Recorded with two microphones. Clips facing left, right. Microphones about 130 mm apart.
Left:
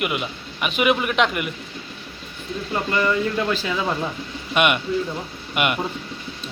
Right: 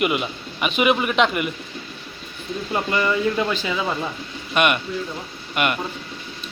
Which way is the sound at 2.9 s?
10° right (ahead or behind).